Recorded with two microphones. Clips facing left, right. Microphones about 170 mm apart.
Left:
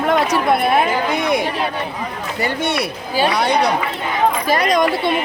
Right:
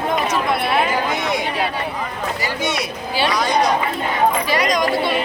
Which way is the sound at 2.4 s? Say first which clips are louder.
Left 6 dB; 60° left (ahead or behind).